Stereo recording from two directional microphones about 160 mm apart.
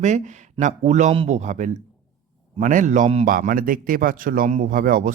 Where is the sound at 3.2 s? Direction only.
60° right (ahead or behind).